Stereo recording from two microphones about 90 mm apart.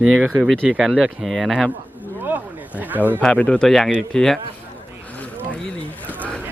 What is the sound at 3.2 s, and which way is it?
Speech, 15° left (ahead or behind).